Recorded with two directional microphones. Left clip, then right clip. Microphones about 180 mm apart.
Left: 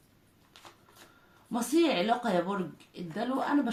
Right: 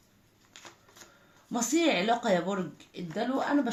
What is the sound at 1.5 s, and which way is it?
Speech, 35° right (ahead or behind).